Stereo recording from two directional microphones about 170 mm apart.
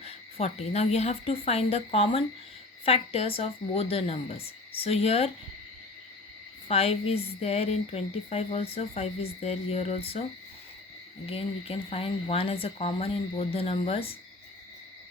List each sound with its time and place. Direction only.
0.0 s speech: 35° left (ahead or behind)
6.7 s speech: 35° left (ahead or behind)
11.3 s speech: 35° left (ahead or behind)